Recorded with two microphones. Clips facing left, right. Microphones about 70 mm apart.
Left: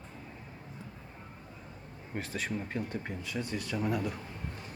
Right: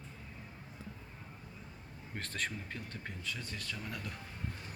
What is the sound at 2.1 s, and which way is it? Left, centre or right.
Speech, centre.